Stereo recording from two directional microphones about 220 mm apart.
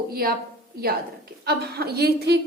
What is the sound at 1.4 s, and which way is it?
Speech, 45° right (ahead or behind).